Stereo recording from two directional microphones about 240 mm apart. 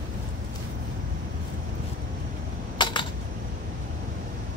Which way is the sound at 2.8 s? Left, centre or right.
Centre.